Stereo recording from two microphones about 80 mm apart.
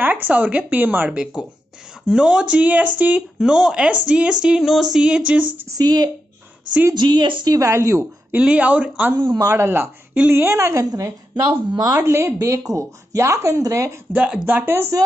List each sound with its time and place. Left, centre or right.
0.0 s speech: right
1.1 s music: centre
3.3 s music: centre
5.7 s speech: right
7.5 s speech: right
8.4 s music: centre
9.1 s speech: right
9.6 s speech: right
10.9 s a woman's voice: right
12.0 s speech: right
14.1 s music: centre
14.4 s speech: right